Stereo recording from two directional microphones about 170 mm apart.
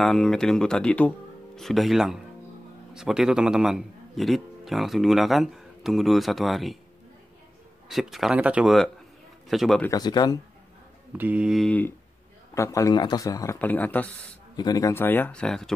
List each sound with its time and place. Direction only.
0.0 s a man's voice: centre (ahead or behind)
7.9 s a man's voice: centre (ahead or behind)
9.8 s a man's voice: 25° left (ahead or behind)
11.1 s a man's voice: 10° right (ahead or behind)
12.5 s a man's voice: 20° left (ahead or behind)
14.6 s speech: 20° left (ahead or behind); by 15.7 s 5° left (ahead or behind)